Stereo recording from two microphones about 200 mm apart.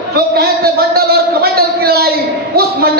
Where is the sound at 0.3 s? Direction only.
50° right (ahead or behind).